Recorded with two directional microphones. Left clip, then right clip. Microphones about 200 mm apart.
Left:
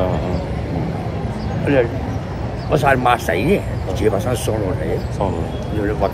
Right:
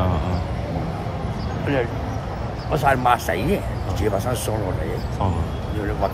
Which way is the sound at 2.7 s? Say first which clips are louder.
Left 3 dB; 50° right (ahead or behind).